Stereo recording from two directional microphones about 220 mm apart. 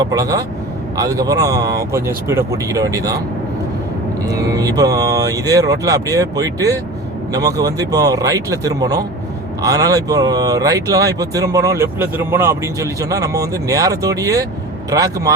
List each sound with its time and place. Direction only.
0.0 s speech: 15° right (ahead or behind)
4.3 s speech: 15° right (ahead or behind)